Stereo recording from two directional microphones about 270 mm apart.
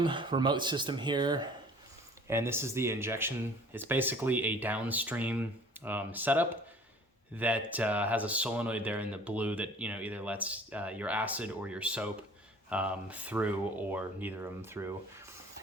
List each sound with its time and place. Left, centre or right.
0.0 s speech: centre